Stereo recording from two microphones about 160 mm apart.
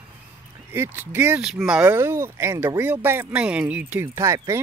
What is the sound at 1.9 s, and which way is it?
Speech, 15° right (ahead or behind).